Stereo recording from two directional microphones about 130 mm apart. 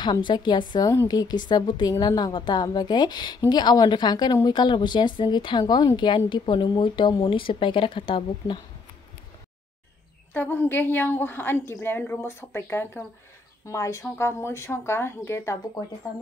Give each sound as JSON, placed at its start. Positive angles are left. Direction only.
{"t": 0.0, "sound": "a woman's voice", "side_deg": 35}
{"t": 10.3, "sound": "a woman's voice", "side_deg": 15}